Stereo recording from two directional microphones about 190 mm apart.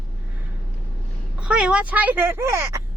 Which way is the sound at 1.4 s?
5° right (ahead or behind).